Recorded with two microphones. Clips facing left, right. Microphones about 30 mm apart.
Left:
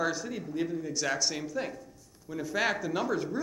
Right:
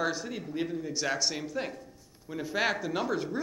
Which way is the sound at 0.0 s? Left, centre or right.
Right.